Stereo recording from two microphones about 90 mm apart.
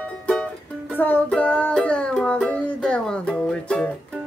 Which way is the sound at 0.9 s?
20° left (ahead or behind).